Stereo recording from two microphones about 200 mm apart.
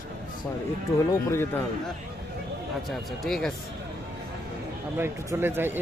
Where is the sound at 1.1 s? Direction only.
10° left (ahead or behind).